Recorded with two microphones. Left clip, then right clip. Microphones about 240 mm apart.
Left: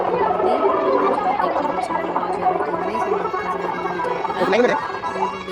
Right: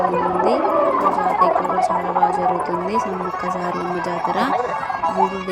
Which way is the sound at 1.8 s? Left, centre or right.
Centre.